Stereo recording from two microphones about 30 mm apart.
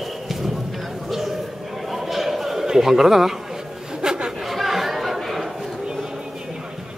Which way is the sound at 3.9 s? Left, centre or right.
Right.